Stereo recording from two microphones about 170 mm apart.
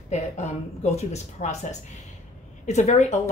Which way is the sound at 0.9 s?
40° left (ahead or behind).